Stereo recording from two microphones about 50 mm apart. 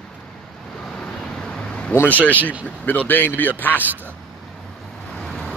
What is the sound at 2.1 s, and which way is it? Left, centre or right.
Speech, left.